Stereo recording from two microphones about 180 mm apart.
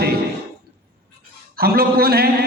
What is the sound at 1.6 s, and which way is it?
Speech, 60° right (ahead or behind).